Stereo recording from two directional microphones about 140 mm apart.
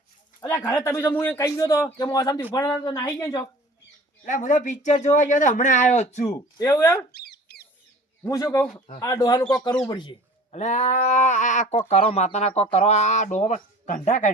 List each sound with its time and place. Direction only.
0.4 s a man's voice: 15° left (ahead or behind)
4.3 s a man's voice: 65° left (ahead or behind)
6.3 s a man's voice: 20° left (ahead or behind)
8.3 s a man's voice: 25° left (ahead or behind)
10.5 s a man's voice: 55° left (ahead or behind)